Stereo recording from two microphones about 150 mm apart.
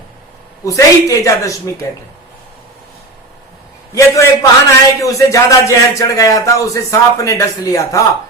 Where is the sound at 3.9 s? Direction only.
20° left (ahead or behind).